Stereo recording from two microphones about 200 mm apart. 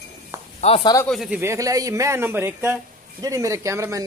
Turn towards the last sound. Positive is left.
turn(degrees=-15)  # may be behind; listen again after turning